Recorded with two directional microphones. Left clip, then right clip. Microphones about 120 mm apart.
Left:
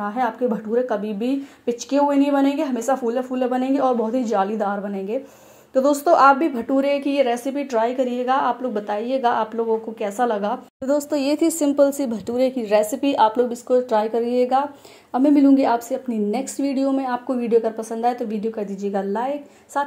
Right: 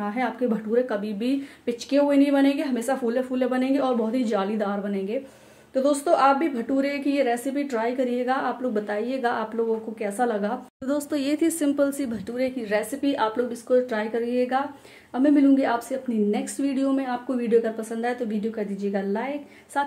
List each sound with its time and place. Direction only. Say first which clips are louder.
0.0 s a woman's voice: left 4 dB; 20° left (ahead or behind)
5.8 s a woman's voice: left 5 dB; 30° left (ahead or behind)
18.9 s speech: left 6 dB; 20° left (ahead or behind)